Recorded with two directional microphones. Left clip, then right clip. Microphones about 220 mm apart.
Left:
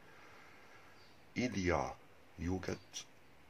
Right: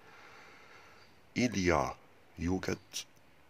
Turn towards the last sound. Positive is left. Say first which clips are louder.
# right 6 dB
turn(degrees=-45)  # may be behind; listen again after turning